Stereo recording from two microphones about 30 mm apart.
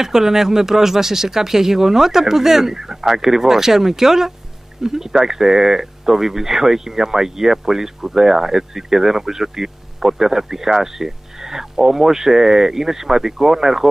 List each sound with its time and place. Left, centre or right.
0.0 s speech: centre